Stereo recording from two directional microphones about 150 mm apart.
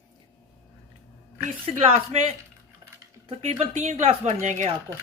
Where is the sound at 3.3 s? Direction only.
50° right (ahead or behind).